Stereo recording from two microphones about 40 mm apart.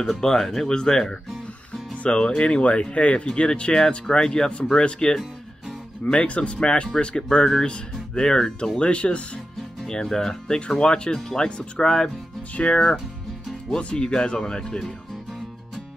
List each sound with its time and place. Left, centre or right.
0.0 s speech: centre
6.0 s speech: left
8.7 s speech: left
9.8 s speech: centre